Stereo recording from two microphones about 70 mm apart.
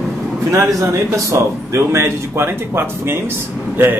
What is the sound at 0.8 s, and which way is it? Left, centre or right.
Speech, right.